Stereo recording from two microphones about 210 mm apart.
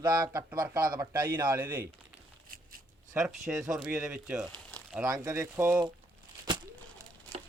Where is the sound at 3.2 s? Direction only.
10° right (ahead or behind).